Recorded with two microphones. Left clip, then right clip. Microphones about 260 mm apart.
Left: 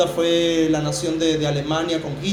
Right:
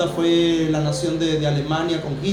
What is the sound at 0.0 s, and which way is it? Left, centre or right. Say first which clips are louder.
A man's voice: even; left.